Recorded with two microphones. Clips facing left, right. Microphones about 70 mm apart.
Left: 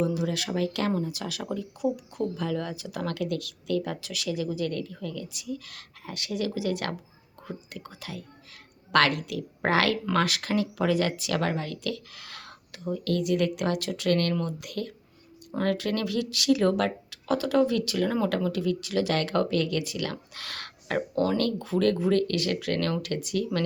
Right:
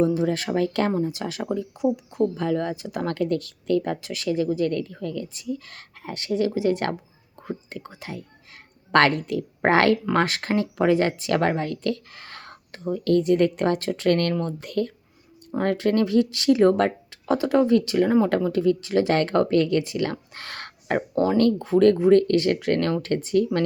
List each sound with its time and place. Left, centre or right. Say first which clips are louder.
0.0 s speech: right 6 dB; right
0.9 s speech: right 5 dB; right